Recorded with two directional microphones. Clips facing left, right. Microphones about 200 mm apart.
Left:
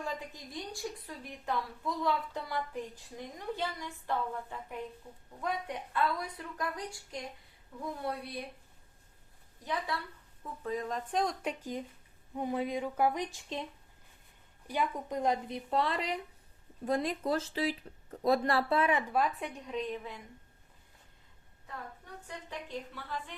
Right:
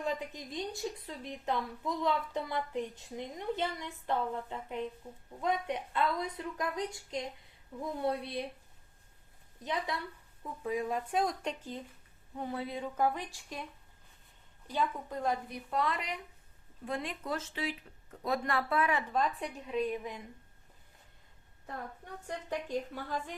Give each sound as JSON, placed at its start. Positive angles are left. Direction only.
{"t": 0.0, "sound": "a woman's voice", "side_deg": -20}
{"t": 9.6, "sound": "a woman's voice", "side_deg": -20}
{"t": 11.4, "sound": "speech", "side_deg": 10}
{"t": 14.7, "sound": "a woman's voice", "side_deg": 15}
{"t": 19.1, "sound": "a woman's voice", "side_deg": 5}
{"t": 22.4, "sound": "a woman's voice", "side_deg": -45}